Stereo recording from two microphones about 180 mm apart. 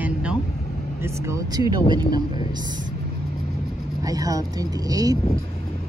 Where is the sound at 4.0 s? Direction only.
20° right (ahead or behind).